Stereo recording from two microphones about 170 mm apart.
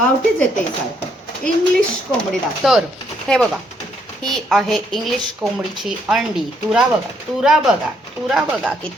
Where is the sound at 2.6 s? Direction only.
5° right (ahead or behind).